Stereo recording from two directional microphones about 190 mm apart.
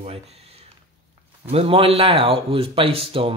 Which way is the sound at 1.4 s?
30° right (ahead or behind).